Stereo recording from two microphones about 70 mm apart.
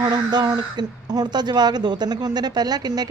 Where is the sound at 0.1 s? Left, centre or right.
Right.